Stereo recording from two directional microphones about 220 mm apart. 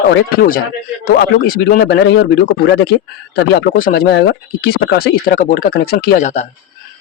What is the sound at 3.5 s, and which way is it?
Speech, 40° left (ahead or behind).